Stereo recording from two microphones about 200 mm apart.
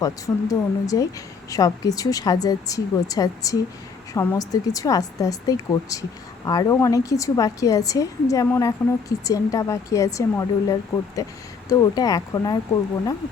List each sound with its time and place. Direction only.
0.0 s a woman's voice: 15° left (ahead or behind)